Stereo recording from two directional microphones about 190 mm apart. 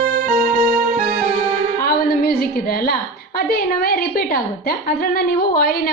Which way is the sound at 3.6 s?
45° left (ahead or behind).